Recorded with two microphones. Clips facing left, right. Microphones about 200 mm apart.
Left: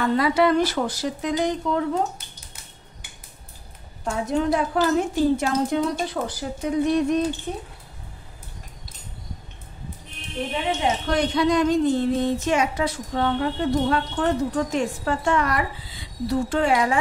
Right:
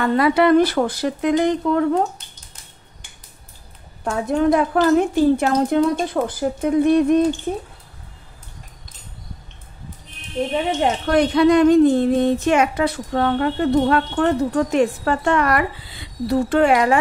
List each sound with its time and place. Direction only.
0.1 s speech: 60° right (ahead or behind)
4.0 s speech: 60° right (ahead or behind)
10.8 s speech: 60° right (ahead or behind)